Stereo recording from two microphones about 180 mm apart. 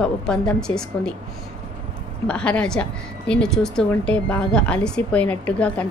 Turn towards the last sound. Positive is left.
turn(degrees=5)  # may be behind; listen again after turning